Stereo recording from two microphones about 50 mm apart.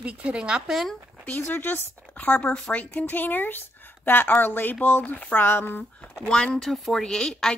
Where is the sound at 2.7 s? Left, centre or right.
Left.